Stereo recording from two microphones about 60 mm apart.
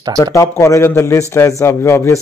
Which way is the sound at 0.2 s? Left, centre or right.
Left.